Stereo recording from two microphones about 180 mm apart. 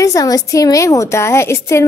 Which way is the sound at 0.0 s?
20° left (ahead or behind).